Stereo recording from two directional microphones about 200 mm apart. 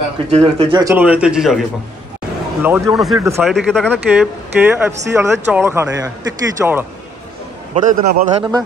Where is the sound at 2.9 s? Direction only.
Centre (ahead or behind).